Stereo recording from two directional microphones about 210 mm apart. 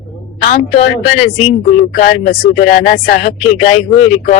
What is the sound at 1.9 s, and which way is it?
Speech, 35° left (ahead or behind).